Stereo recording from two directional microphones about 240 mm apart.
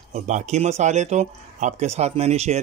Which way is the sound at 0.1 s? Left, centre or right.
Right.